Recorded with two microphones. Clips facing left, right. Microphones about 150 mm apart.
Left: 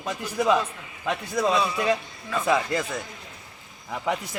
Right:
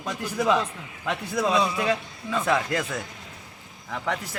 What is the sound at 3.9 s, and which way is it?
Speech, 10° left (ahead or behind).